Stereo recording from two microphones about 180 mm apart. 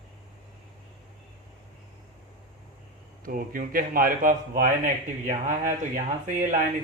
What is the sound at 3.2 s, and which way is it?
Speech, 50° right (ahead or behind).